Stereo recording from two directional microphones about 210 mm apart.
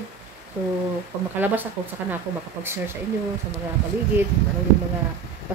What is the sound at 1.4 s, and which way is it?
Speech, 10° right (ahead or behind).